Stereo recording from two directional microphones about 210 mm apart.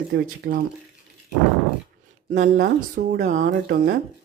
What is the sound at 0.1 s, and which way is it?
Speech, 45° right (ahead or behind).